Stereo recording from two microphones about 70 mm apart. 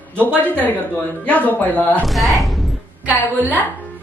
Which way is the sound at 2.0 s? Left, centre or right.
Centre.